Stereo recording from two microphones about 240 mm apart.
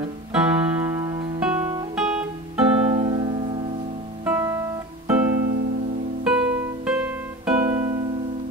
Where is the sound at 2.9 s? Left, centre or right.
Right.